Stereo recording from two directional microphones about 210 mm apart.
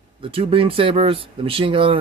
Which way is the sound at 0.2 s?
25° right (ahead or behind).